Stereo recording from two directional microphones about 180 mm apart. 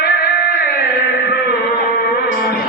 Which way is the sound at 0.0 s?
60° left (ahead or behind).